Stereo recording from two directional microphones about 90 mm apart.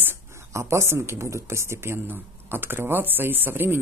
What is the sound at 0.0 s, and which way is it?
Speech, 30° right (ahead or behind).